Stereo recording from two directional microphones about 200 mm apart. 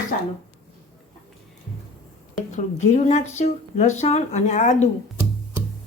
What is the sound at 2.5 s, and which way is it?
Speech, 35° left (ahead or behind).